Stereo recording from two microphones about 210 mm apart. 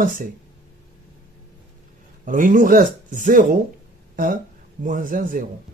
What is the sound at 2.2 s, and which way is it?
A man's voice, 40° right (ahead or behind).